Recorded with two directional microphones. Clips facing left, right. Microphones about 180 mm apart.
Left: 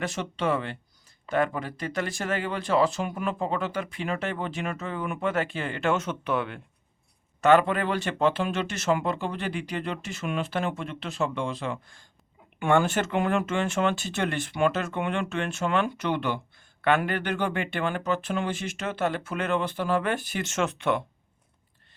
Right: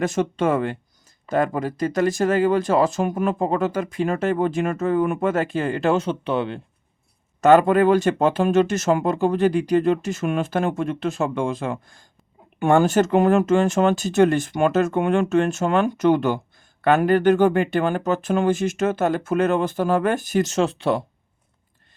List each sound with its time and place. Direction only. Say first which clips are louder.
0.0 s speech: right 8 dB; 45° right (ahead or behind); by 6.6 s 30° right (ahead or behind)
7.4 s speech: right 7 dB; 40° right (ahead or behind)